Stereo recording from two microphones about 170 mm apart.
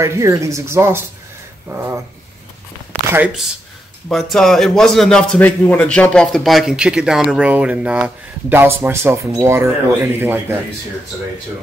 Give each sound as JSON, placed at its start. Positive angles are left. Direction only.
{"t": 0.0, "sound": "speech", "side_deg": -15}
{"t": 3.1, "sound": "a man's voice", "side_deg": -10}